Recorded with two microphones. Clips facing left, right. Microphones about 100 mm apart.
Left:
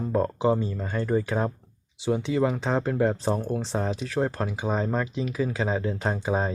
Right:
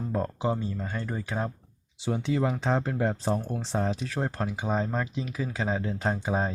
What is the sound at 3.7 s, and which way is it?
Speech, 20° left (ahead or behind).